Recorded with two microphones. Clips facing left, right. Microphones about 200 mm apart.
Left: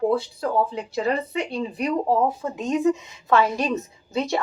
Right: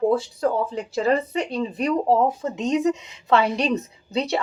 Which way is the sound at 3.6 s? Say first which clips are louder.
Right 2 dB; 20° right (ahead or behind).